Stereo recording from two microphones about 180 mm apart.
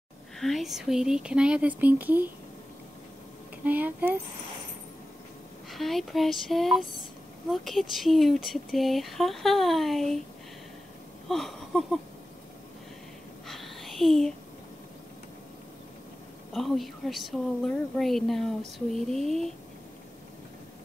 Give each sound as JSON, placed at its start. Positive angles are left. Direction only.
{"t": 0.4, "sound": "speech", "side_deg": 0}
{"t": 3.6, "sound": "speech", "side_deg": -10}
{"t": 5.7, "sound": "speech", "side_deg": 0}
{"t": 11.2, "sound": "a sound", "side_deg": 0}
{"t": 13.5, "sound": "a sound", "side_deg": 0}
{"t": 16.5, "sound": "speech", "side_deg": 0}